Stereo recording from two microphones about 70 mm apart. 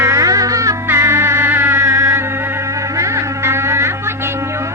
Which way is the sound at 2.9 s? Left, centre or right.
Right.